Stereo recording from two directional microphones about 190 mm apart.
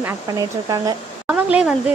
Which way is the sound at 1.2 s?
5° right (ahead or behind).